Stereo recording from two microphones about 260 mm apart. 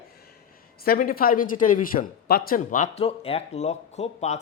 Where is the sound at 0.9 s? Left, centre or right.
Left.